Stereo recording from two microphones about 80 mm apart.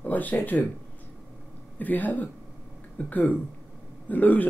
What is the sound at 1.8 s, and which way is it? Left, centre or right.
Speech, left.